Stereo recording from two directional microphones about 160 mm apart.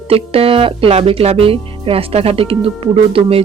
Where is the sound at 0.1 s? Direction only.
35° right (ahead or behind).